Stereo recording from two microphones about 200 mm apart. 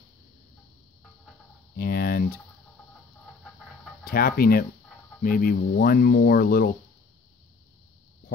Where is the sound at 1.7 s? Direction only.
50° left (ahead or behind).